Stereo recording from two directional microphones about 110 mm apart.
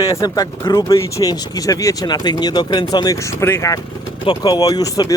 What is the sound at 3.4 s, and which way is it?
Speech, 25° left (ahead or behind).